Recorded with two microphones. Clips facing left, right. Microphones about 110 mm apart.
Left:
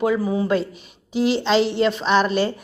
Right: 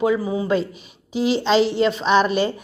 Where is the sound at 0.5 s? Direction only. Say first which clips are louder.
Even; 50° left (ahead or behind).